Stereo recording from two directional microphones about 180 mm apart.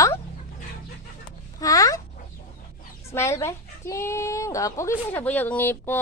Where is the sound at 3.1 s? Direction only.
15° left (ahead or behind).